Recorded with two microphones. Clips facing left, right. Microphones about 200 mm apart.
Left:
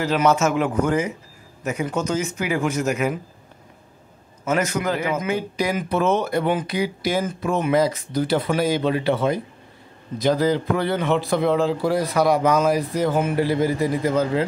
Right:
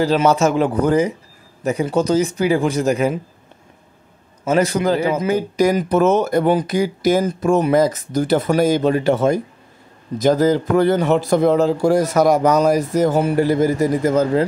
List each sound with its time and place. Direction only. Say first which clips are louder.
0.0 s a man's voice: right 4 dB; 30° right (ahead or behind)
4.5 s speech: right 6 dB; 30° right (ahead or behind)